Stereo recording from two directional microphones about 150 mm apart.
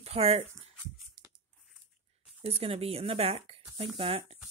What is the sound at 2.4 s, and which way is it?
Speech, 40° right (ahead or behind).